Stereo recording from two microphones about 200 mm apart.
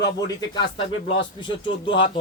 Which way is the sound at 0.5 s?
20° left (ahead or behind).